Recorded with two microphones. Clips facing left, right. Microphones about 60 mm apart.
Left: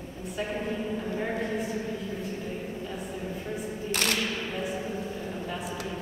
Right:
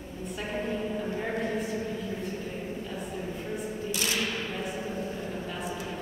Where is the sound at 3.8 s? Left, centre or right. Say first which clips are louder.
Left 4 dB; left.